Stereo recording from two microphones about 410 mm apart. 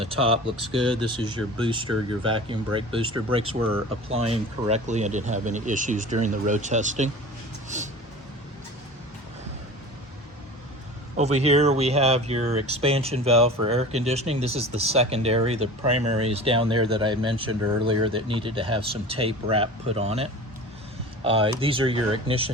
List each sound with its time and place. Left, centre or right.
0.0 s speech: centre
11.2 s speech: centre